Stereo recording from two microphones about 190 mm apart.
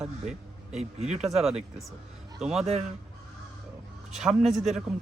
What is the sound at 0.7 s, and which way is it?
Speech, 35° right (ahead or behind).